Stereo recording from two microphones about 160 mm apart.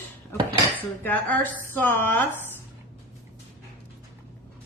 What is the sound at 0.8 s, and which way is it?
Speech, 10° left (ahead or behind).